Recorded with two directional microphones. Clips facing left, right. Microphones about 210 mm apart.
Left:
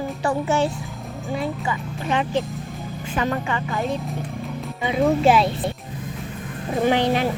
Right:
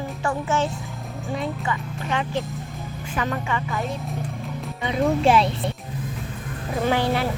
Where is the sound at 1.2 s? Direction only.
Centre (ahead or behind).